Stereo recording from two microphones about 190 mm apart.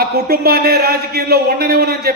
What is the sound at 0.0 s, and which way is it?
A man's voice, 55° right (ahead or behind).